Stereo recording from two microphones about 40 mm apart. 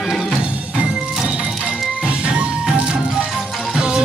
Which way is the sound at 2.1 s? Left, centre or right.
Right.